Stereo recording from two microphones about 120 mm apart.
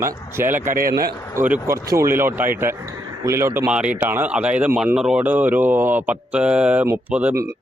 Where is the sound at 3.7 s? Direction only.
10° right (ahead or behind).